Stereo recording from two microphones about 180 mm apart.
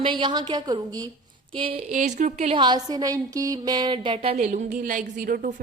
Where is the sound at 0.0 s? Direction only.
25° right (ahead or behind).